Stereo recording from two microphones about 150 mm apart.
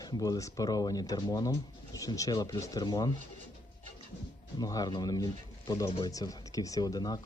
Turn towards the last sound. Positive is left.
turn(degrees=25)  # may be behind; listen again after turning